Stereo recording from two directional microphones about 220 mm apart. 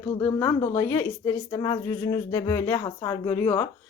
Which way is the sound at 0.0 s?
10° left (ahead or behind).